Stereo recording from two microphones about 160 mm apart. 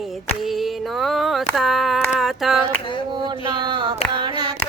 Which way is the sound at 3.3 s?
30° right (ahead or behind).